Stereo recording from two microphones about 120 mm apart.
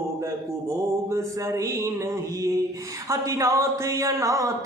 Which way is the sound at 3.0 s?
25° right (ahead or behind).